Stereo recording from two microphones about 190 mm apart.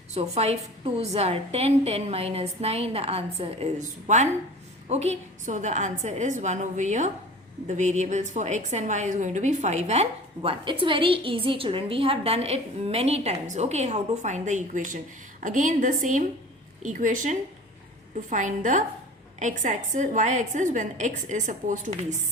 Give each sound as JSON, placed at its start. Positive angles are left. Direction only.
{"t": 0.1, "sound": "a woman's voice", "side_deg": -35}